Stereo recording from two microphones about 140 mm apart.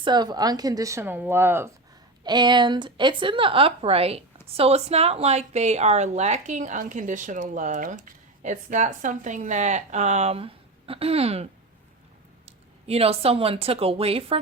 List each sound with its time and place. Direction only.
0.0 s speech: 30° right (ahead or behind)
2.2 s a woman's voice: 30° right (ahead or behind)
12.5 s speech: 45° right (ahead or behind)